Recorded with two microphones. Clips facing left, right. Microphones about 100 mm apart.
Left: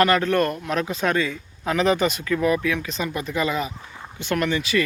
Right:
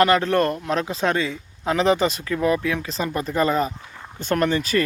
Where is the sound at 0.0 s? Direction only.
25° right (ahead or behind).